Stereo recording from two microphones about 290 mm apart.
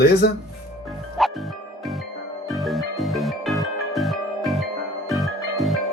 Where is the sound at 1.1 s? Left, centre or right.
Centre.